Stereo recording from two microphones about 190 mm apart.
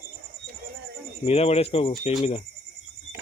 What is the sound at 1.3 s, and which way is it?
Speech, 35° left (ahead or behind).